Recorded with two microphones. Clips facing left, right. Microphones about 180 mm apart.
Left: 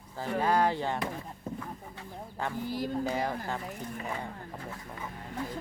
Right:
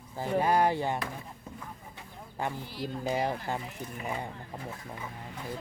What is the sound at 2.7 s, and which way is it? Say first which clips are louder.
Speech: left 4 dB; 45° left (ahead or behind).